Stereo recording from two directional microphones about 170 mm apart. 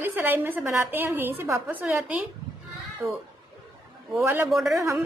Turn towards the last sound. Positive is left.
turn(degrees=0)  # may be behind; listen again after turning